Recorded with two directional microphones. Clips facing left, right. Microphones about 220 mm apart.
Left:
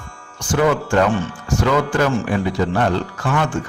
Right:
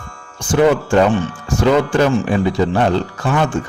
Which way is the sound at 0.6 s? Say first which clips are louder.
Right 4 dB; 25° right (ahead or behind).